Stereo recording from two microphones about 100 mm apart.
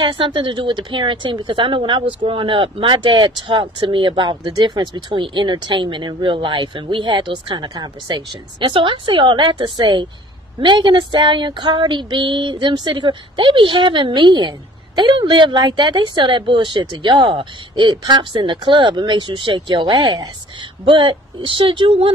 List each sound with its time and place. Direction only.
0.0 s speech: 50° right (ahead or behind)
10.6 s female singing: 50° right (ahead or behind)
20.8 s speech: 55° right (ahead or behind)